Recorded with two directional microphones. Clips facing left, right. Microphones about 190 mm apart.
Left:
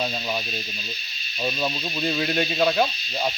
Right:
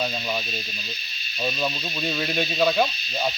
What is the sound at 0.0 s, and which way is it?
Speech, 10° left (ahead or behind).